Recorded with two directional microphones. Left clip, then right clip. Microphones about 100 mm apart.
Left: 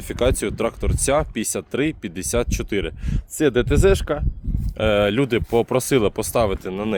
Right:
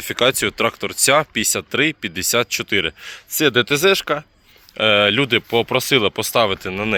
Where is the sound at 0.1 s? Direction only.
15° left (ahead or behind).